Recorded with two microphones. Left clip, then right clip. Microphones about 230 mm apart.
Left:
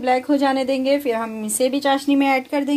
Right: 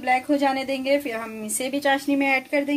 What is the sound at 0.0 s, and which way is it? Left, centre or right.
A woman's voice, left.